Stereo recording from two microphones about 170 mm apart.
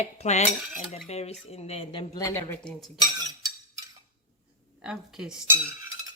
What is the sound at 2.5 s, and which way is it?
Speech, 5° left (ahead or behind).